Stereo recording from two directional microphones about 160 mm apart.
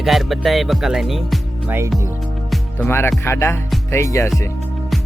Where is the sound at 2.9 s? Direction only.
15° left (ahead or behind).